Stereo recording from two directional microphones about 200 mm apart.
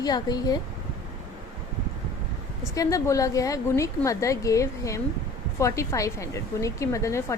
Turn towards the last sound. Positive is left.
turn(degrees=15)  # may be behind; listen again after turning